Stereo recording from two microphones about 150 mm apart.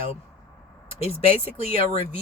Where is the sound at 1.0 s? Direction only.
45° left (ahead or behind).